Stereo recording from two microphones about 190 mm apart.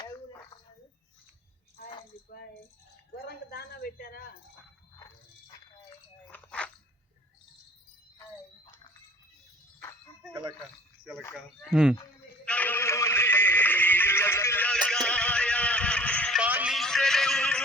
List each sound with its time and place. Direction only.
3.2 s speech: 55° left (ahead or behind)
4.9 s dog: 15° left (ahead or behind)
6.2 s biting: 5° left (ahead or behind)
8.6 s a sound: 20° left (ahead or behind)
11.3 s speech: centre (ahead or behind)
12.5 s a sound: 10° left (ahead or behind)
16.4 s music: 5° right (ahead or behind)